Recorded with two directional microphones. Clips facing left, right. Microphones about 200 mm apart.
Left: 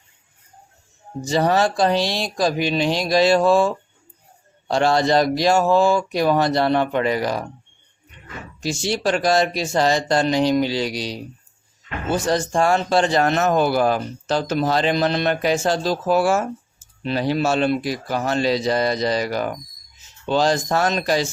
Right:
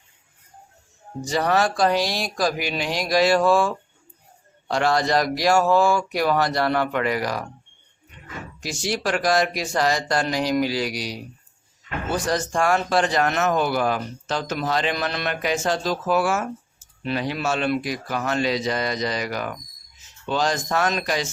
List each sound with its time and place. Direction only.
1.2 s speech: 25° left (ahead or behind)
8.6 s a man's voice: 25° left (ahead or behind)